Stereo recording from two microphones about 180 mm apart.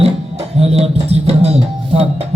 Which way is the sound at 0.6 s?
35° right (ahead or behind).